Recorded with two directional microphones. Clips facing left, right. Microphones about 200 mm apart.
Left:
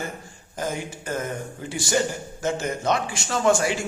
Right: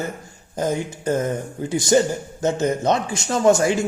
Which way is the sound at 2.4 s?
20° right (ahead or behind).